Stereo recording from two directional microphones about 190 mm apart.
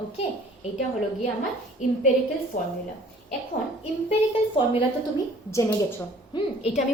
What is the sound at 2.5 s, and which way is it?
Speech, 40° left (ahead or behind).